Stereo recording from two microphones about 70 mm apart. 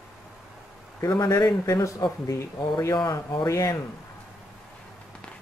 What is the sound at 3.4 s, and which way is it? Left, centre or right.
Speech, left.